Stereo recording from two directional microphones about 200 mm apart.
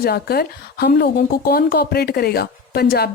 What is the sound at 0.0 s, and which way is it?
A woman's voice, 50° left (ahead or behind).